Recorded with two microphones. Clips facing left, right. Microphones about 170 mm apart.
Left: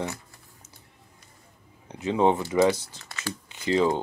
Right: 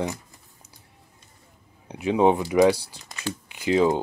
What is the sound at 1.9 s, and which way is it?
Speech, 15° right (ahead or behind).